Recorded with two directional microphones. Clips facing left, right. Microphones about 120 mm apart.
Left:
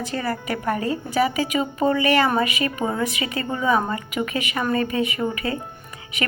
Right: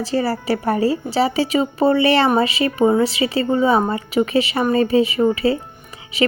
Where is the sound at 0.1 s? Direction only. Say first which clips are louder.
Right 8 dB; 30° right (ahead or behind).